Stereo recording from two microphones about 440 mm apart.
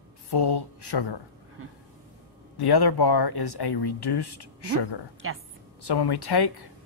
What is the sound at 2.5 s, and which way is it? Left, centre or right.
Speech, left.